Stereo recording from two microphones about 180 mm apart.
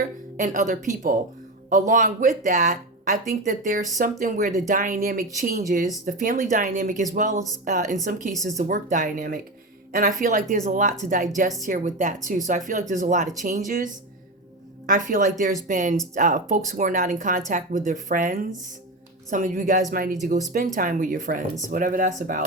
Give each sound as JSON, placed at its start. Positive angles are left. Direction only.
{"t": 0.3, "sound": "speech", "side_deg": -45}